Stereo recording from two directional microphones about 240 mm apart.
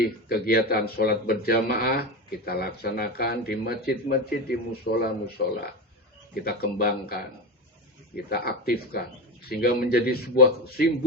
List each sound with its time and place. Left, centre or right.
0.3 s speech: left